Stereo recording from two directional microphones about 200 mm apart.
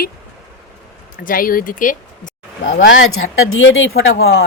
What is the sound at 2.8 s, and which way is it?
Speech, 80° left.